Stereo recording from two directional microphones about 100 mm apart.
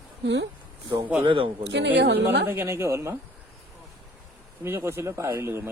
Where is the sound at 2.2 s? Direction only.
20° right (ahead or behind).